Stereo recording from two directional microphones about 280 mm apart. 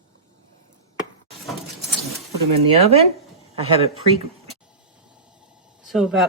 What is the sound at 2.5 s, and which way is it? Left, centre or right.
Speech, right.